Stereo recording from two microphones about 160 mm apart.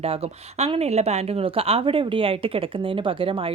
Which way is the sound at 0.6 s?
40° right (ahead or behind).